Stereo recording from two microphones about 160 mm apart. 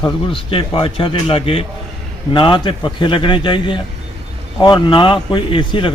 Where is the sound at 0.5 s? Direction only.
35° left (ahead or behind).